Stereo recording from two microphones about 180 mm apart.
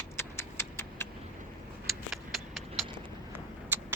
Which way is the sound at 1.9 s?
Centre (ahead or behind).